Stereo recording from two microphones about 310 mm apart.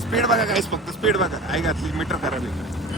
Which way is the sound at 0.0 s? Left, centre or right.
Centre.